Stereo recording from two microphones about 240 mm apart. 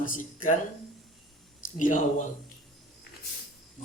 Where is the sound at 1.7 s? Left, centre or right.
Left.